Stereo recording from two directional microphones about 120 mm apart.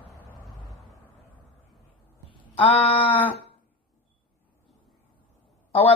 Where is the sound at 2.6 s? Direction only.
55° left (ahead or behind).